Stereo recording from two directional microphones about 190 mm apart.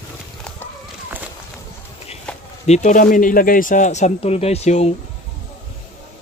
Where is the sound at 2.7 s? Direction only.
40° left (ahead or behind).